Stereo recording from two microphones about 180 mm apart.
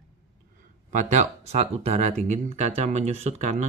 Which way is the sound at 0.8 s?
40° right (ahead or behind).